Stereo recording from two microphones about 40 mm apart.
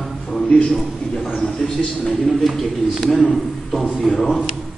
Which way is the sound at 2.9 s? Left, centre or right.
Centre.